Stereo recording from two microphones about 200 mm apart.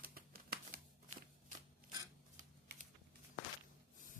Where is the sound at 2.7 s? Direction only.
55° right (ahead or behind).